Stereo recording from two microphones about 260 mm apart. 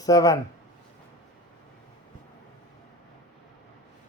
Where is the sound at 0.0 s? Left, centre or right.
Centre.